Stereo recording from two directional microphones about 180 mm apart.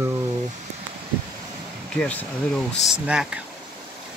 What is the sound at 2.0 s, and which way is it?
Speech, 5° left (ahead or behind).